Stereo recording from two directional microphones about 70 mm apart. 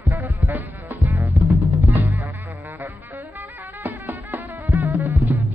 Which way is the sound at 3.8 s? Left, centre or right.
Right.